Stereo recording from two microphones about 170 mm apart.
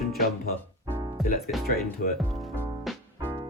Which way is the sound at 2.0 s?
55° left (ahead or behind).